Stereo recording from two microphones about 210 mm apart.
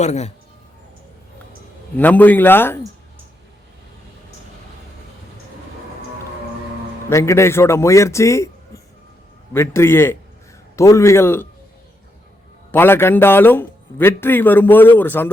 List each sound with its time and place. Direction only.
0.0 s speech: 35° left (ahead or behind)
2.0 s a man's voice: 10° left (ahead or behind)
7.1 s a man's voice: 15° left (ahead or behind)
9.5 s a man's voice: 10° left (ahead or behind)
12.7 s a man's voice: 10° left (ahead or behind)